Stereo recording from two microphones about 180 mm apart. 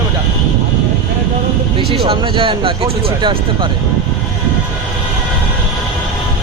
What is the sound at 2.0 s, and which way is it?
Speech, 30° right (ahead or behind).